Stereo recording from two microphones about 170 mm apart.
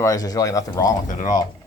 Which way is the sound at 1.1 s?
50° left (ahead or behind).